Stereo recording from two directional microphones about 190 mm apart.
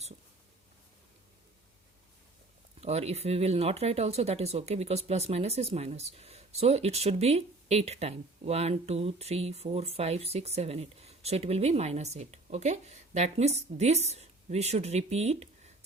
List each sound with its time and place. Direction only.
2.8 s speech: 35° right (ahead or behind)